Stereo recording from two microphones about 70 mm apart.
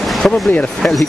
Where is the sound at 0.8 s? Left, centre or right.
Centre.